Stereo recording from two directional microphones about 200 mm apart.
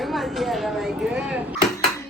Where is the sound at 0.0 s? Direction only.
Centre (ahead or behind).